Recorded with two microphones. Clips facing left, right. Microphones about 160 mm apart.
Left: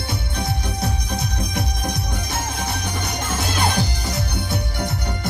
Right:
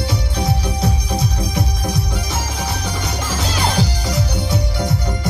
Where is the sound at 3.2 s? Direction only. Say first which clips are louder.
Right 1 dB; 55° left (ahead or behind).